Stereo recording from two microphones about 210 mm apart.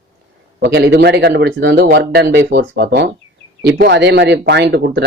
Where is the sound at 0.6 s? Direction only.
50° right (ahead or behind).